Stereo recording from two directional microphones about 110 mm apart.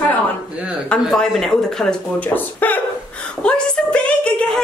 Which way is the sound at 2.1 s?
15° left (ahead or behind).